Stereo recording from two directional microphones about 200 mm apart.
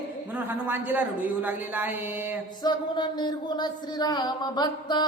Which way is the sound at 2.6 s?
20° left (ahead or behind).